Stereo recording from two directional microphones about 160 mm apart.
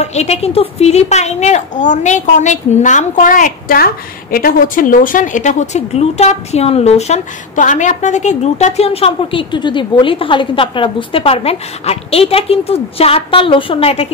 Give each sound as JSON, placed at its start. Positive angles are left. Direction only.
{"t": 0.0, "sound": "a woman's voice", "side_deg": 45}